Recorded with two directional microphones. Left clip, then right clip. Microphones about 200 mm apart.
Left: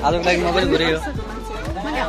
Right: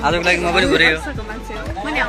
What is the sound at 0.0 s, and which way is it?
Speech, 5° left (ahead or behind).